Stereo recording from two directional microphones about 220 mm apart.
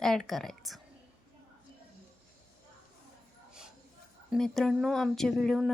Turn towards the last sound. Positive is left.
turn(degrees=0)  # may be behind; listen again after turning